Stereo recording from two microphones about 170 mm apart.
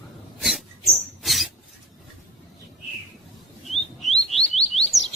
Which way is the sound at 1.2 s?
Centre (ahead or behind).